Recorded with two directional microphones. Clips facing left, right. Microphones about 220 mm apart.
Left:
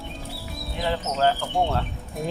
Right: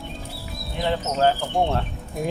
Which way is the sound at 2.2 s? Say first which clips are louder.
Right 3 dB; centre (ahead or behind).